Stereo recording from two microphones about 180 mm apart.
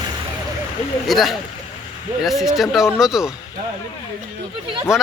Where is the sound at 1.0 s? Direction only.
Centre (ahead or behind).